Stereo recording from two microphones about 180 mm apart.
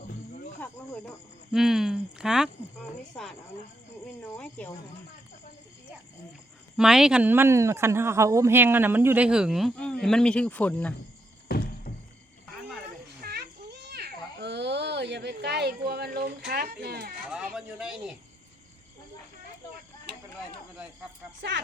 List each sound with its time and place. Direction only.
1.5 s speech: centre (ahead or behind)
4.0 s speech: 5° left (ahead or behind)
6.7 s speech: 5° right (ahead or behind)
11.4 s a sound: 55° left (ahead or behind)
13.2 s children playing: 65° right (ahead or behind)
16.5 s speech: 60° right (ahead or behind)
17.2 s speech: 5° right (ahead or behind)